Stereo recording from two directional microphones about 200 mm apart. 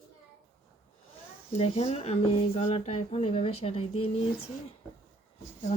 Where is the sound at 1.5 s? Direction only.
30° left (ahead or behind).